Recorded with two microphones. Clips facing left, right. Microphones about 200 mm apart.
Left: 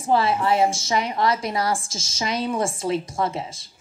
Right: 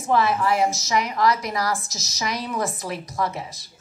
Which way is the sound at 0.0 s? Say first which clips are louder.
Even; 30° left (ahead or behind).